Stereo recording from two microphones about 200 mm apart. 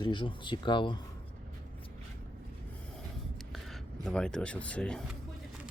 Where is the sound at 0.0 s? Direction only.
25° left (ahead or behind).